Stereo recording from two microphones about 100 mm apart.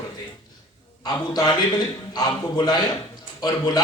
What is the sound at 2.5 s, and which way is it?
A man's voice, 45° left (ahead or behind).